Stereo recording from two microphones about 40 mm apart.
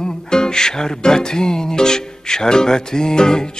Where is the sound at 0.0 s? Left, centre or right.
Centre.